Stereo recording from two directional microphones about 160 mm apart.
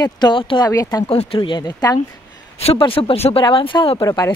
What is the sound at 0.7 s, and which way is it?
Speech, 20° left (ahead or behind).